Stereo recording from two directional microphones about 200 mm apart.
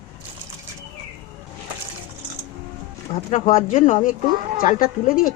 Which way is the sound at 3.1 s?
35° left (ahead or behind).